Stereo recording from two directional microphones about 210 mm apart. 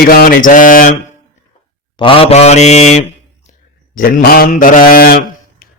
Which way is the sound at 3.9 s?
45° left (ahead or behind).